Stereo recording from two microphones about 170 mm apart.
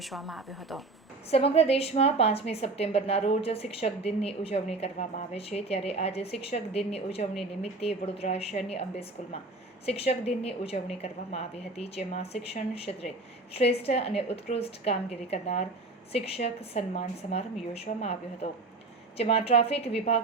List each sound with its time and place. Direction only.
0.0 s speech: centre (ahead or behind)
1.3 s a woman's voice: 35° left (ahead or behind)